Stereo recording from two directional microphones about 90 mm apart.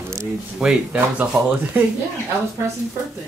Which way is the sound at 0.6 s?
15° right (ahead or behind).